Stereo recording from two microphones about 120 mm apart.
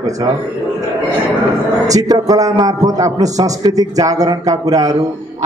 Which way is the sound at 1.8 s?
30° right (ahead or behind).